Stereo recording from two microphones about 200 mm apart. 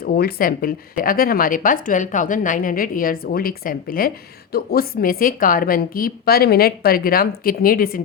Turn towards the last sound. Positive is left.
turn(degrees=45)  # may be behind; listen again after turning